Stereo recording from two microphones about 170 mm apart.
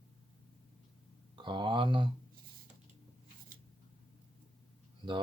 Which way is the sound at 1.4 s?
25° right (ahead or behind).